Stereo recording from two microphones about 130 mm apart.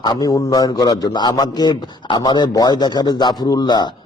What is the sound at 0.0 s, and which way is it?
Speech, 30° left (ahead or behind).